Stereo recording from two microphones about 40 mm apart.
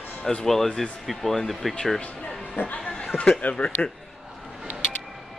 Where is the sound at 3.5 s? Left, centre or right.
Left.